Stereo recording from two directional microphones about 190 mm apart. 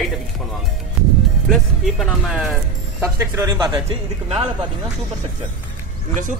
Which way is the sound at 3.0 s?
15° right (ahead or behind).